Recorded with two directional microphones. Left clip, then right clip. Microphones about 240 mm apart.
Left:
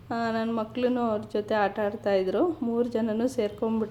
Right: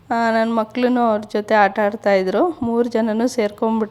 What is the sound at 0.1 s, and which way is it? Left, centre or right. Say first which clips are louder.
A woman's voice: right 11 dB; right.